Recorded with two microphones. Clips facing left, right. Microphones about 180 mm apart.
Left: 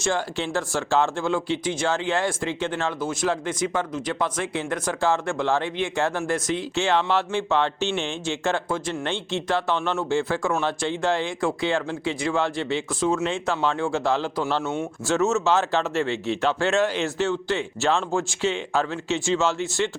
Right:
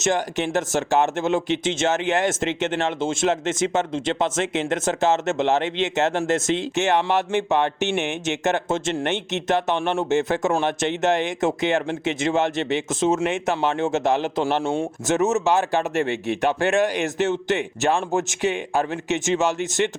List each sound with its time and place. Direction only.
0.0 s speech: 20° right (ahead or behind)
15.0 s a man's voice: 20° right (ahead or behind)